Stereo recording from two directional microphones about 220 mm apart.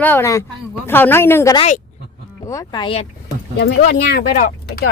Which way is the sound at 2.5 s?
15° left (ahead or behind).